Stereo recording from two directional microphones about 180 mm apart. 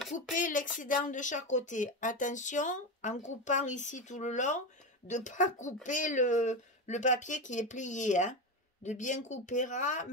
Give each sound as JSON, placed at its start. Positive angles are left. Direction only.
{"t": 0.3, "sound": "a woman's voice", "side_deg": 45}